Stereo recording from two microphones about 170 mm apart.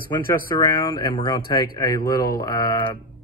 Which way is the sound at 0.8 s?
25° left (ahead or behind).